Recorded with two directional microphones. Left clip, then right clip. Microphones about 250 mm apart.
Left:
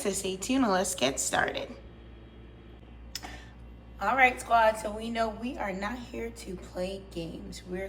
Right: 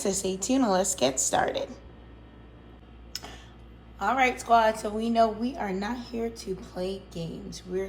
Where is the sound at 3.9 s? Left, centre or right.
Centre.